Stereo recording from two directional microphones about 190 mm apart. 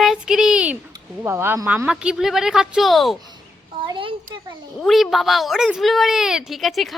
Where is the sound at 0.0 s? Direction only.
Centre (ahead or behind).